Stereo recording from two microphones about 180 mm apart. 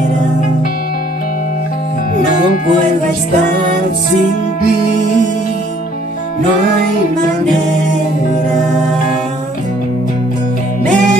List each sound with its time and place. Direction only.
2.4 s music: 50° left (ahead or behind)